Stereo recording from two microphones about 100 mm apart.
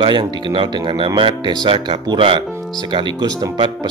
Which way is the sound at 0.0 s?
50° right (ahead or behind).